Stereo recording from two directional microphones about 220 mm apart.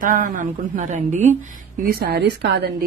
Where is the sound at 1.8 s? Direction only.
45° right (ahead or behind).